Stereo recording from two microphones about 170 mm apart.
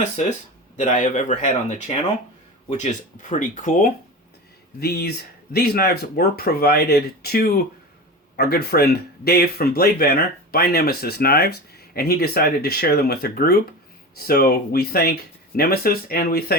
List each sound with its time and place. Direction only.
0.8 s speech: 45° left (ahead or behind)
2.7 s speech: 45° left (ahead or behind)
4.8 s speech: 70° left (ahead or behind)